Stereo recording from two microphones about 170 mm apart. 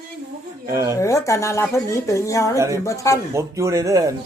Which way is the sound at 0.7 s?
20° right (ahead or behind).